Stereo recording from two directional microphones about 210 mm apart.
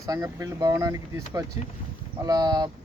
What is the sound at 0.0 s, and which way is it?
Speech, 15° right (ahead or behind).